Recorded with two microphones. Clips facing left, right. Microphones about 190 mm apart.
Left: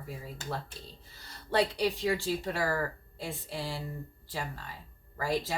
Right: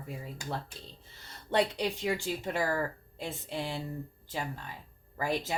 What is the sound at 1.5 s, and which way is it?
Speech, 20° right (ahead or behind).